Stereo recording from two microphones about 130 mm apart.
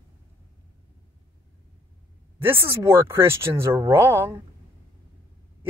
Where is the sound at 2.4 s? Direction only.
20° right (ahead or behind).